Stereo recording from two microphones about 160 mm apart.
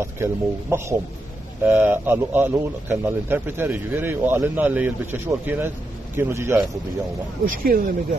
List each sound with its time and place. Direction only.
0.0 s speech: 15° right (ahead or behind)
7.4 s speech: 65° right (ahead or behind)